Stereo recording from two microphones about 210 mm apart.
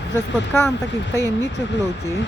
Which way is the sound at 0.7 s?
55° left (ahead or behind).